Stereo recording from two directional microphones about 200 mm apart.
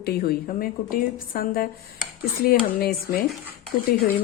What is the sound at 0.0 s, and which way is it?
Speech, 50° left (ahead or behind).